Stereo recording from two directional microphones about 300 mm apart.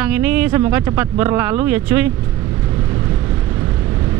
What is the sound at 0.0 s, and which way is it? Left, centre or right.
Speech, centre.